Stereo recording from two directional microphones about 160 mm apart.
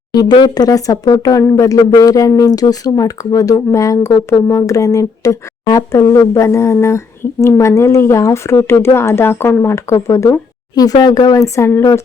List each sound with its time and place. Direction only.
0.1 s speech: 25° left (ahead or behind)